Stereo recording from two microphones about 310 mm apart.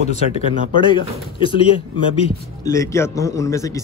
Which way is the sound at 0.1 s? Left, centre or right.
Centre.